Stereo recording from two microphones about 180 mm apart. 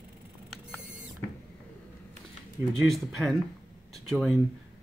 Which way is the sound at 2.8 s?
Centre (ahead or behind).